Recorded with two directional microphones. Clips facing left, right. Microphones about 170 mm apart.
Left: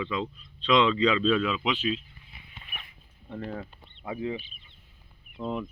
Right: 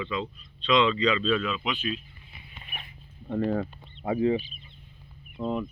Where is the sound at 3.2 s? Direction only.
50° right (ahead or behind).